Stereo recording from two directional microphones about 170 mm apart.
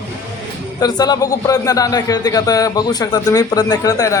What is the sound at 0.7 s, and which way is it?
A man's voice, 25° left (ahead or behind).